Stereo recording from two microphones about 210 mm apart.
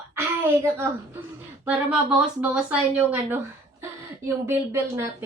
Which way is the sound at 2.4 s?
5° right (ahead or behind).